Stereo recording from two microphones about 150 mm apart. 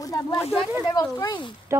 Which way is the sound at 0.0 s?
25° left (ahead or behind).